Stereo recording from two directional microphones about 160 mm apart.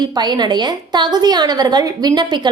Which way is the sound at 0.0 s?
25° right (ahead or behind).